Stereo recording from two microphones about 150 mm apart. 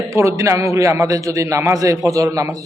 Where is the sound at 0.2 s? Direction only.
20° right (ahead or behind).